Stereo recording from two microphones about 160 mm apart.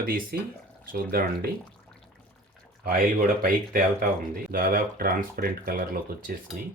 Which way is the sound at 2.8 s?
65° right (ahead or behind).